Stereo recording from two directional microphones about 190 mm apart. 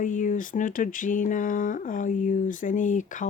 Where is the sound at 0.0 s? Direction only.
40° left (ahead or behind).